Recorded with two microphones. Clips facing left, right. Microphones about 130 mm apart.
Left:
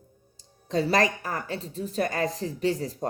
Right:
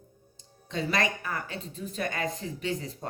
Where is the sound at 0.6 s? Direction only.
35° left (ahead or behind).